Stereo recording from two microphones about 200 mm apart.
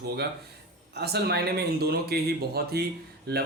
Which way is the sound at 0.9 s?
55° right (ahead or behind).